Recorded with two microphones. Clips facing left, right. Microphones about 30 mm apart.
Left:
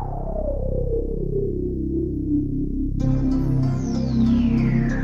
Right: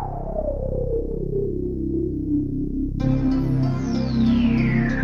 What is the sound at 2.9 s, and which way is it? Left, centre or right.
Music, right.